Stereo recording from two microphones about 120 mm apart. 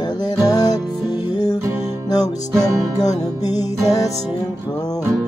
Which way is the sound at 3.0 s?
30° left (ahead or behind).